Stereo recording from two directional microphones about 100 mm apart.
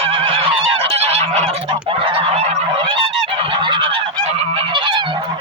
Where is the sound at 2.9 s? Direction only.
60° right (ahead or behind).